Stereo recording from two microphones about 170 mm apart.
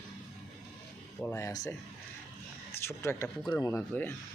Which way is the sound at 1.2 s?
15° left (ahead or behind).